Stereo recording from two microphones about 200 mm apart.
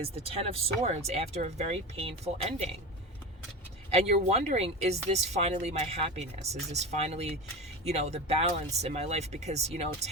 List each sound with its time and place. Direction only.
0.0 s speech: 30° right (ahead or behind)
3.9 s speech: 30° right (ahead or behind)